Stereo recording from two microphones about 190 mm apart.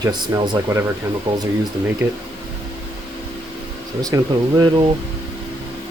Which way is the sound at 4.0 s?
20° right (ahead or behind).